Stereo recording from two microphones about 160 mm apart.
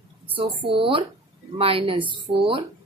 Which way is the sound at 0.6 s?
35° right (ahead or behind).